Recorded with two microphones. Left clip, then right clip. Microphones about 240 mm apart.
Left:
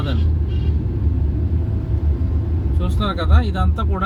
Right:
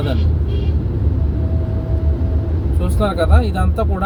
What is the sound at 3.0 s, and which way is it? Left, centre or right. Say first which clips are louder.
Speech: right 6 dB; right.